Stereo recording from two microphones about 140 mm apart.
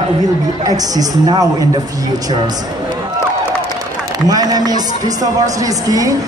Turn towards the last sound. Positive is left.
turn(degrees=-25)  # may be behind; listen again after turning